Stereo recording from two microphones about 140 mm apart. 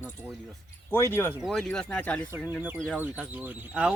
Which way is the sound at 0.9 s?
15° left (ahead or behind).